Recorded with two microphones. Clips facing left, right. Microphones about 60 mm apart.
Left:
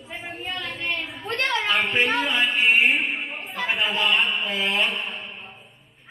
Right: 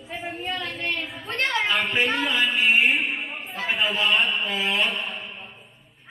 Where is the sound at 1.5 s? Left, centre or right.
Centre.